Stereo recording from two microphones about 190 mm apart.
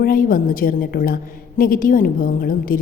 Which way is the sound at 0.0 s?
50° left (ahead or behind).